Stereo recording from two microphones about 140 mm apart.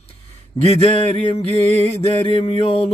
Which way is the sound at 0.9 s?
40° left (ahead or behind).